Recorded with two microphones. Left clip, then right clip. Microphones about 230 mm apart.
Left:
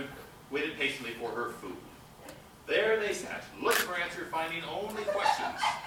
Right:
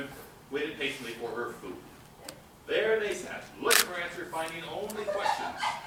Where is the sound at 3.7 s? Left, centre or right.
Centre.